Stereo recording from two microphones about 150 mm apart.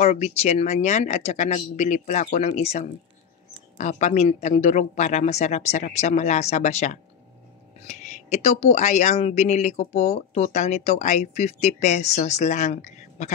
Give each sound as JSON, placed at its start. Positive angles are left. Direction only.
{"t": 0.0, "sound": "a woman's voice", "side_deg": 45}